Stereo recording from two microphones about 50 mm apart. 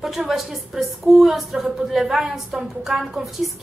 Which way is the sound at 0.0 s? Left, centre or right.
Centre.